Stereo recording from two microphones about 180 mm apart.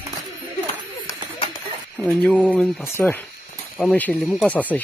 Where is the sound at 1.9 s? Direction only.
5° left (ahead or behind).